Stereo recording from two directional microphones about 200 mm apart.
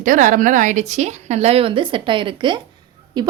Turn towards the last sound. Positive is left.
turn(degrees=-20)  # may be behind; listen again after turning